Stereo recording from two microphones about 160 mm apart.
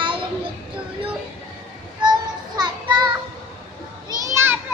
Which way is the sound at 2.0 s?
25° right (ahead or behind).